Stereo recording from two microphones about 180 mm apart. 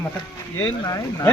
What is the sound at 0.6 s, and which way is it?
Speech, 15° left (ahead or behind).